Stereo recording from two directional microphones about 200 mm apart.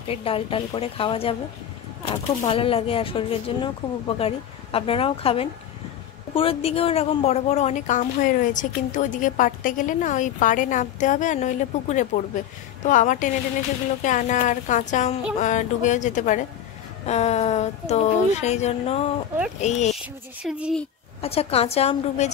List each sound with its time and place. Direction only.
0.1 s a woman's voice: 30° left (ahead or behind)
2.4 s a woman's voice: 30° left (ahead or behind)
20.4 s speech: 5° right (ahead or behind)
21.2 s a woman's voice: 30° left (ahead or behind)